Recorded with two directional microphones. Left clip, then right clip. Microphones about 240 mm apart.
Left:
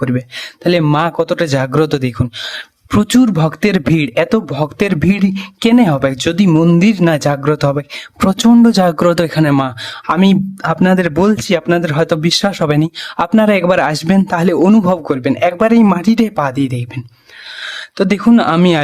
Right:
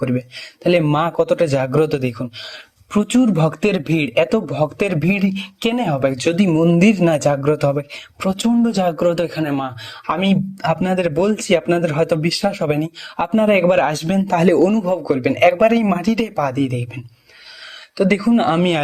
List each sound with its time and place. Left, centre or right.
0.6 s speech: centre
10.2 s speech: centre
14.6 s speech: left
14.8 s speech: centre
17.9 s speech: centre